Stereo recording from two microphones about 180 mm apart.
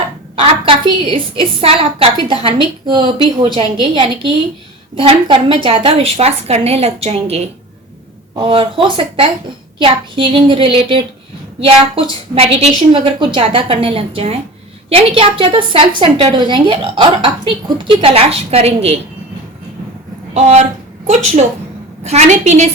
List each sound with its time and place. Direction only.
0.3 s a woman's voice: 30° right (ahead or behind)
12.3 s a woman's voice: 30° right (ahead or behind)
20.3 s a woman's voice: 40° right (ahead or behind)
22.0 s a woman's voice: 40° right (ahead or behind)